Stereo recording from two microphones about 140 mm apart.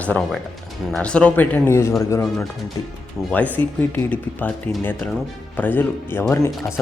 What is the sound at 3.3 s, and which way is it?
Speech, 10° left (ahead or behind).